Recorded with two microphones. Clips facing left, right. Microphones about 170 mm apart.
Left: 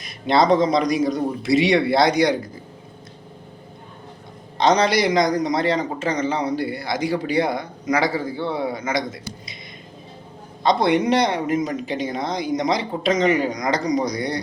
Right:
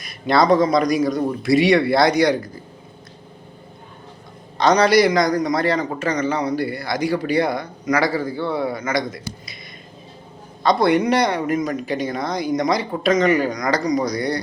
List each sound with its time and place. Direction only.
0.0 s a man's voice: 25° left (ahead or behind)
4.5 s a man's voice: 20° left (ahead or behind)
10.6 s a man's voice: 20° left (ahead or behind)